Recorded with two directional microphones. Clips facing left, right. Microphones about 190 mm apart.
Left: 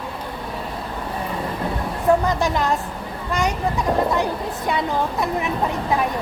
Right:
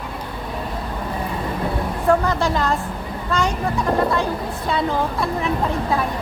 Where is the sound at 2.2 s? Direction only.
15° left (ahead or behind).